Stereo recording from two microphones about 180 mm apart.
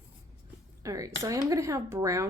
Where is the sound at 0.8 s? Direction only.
20° right (ahead or behind).